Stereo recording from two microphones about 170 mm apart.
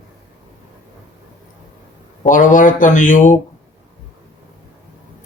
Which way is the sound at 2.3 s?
50° left (ahead or behind).